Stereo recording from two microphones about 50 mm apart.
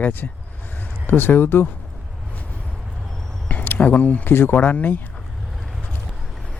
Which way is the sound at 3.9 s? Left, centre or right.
Left.